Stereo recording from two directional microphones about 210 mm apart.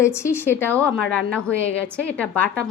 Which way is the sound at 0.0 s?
15° left (ahead or behind).